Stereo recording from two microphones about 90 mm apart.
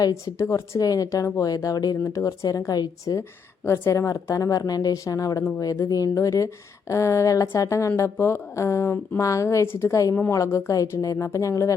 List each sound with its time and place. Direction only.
0.0 s speech: 35° left (ahead or behind)
2.0 s speech: 35° left (ahead or behind)
3.7 s speech: 35° left (ahead or behind)